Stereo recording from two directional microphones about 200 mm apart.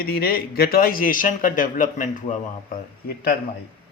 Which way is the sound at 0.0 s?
50° left (ahead or behind).